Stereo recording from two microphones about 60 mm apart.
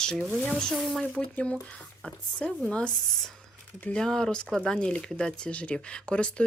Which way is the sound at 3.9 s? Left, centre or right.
Centre.